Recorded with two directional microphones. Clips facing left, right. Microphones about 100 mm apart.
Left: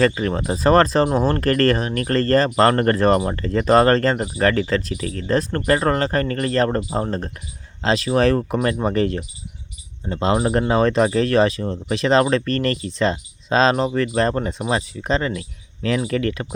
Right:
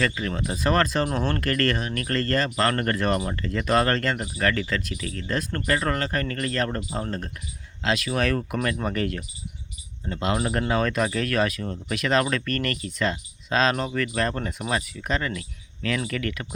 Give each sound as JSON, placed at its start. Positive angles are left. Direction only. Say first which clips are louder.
{"t": 0.0, "sound": "speech", "louder": "left 7 dB", "side_deg": 35}